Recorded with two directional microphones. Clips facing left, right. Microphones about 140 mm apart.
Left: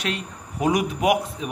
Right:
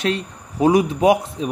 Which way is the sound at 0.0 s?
30° right (ahead or behind).